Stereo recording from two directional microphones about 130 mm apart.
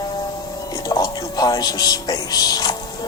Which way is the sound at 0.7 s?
30° left (ahead or behind).